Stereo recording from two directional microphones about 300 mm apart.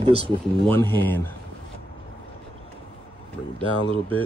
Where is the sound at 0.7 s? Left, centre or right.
Centre.